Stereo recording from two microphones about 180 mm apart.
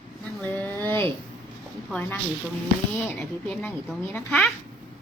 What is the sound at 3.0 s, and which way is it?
Speech, 10° left (ahead or behind).